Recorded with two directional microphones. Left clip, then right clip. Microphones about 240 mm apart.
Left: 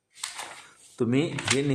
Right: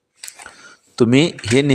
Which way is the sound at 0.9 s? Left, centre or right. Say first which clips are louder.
Right 12 dB; right.